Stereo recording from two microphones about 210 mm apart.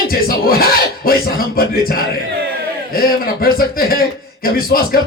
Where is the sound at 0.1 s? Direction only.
45° left (ahead or behind).